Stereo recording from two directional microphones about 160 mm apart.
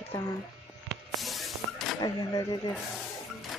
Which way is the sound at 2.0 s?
25° left (ahead or behind).